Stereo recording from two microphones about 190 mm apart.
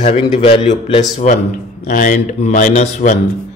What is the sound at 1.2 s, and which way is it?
Speech, 40° left (ahead or behind).